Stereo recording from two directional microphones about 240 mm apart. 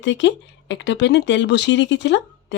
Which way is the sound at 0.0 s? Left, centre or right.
Left.